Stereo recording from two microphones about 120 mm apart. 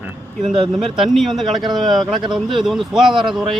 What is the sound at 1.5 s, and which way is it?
Speech, 35° right (ahead or behind).